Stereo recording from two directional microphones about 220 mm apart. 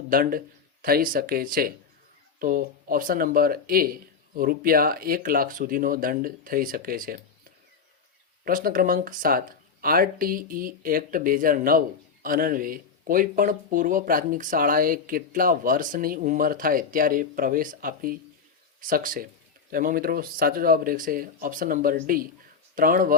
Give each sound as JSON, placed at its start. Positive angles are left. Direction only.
{"t": 0.1, "sound": "speech", "side_deg": -40}
{"t": 8.4, "sound": "speech", "side_deg": -40}